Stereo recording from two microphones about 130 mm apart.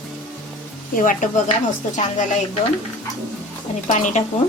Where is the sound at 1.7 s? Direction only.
70° left (ahead or behind).